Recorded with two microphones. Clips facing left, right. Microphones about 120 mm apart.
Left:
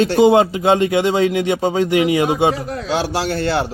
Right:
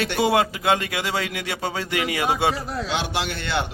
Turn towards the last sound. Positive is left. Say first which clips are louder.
# left 7 dB
turn(degrees=35)  # may be behind; listen again after turning